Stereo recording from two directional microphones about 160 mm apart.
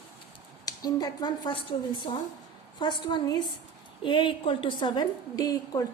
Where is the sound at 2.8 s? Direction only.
30° left (ahead or behind).